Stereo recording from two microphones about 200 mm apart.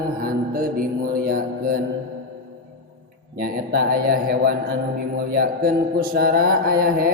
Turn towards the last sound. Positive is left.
turn(degrees=-45)  # may be behind; listen again after turning